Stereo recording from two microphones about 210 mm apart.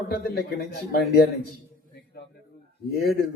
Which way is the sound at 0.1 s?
50° left (ahead or behind).